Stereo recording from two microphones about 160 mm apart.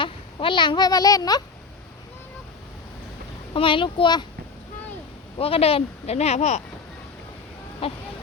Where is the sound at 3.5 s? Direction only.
30° left (ahead or behind).